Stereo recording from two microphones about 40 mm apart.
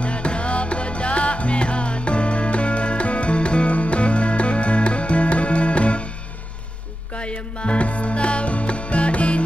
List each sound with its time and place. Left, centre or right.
0.0 s music: left
7.2 s music: left